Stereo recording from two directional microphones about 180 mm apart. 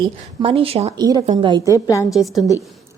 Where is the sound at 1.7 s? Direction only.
20° left (ahead or behind).